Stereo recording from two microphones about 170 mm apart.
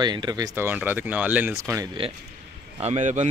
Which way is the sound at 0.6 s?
10° right (ahead or behind).